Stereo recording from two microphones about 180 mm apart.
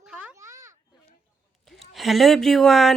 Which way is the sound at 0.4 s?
15° right (ahead or behind).